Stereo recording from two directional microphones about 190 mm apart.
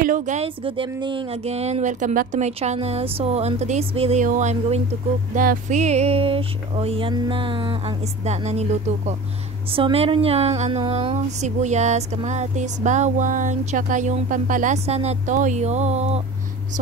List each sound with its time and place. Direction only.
0.0 s speech: 40° right (ahead or behind)